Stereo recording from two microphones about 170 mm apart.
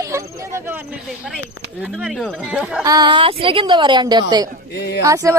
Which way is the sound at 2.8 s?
25° right (ahead or behind).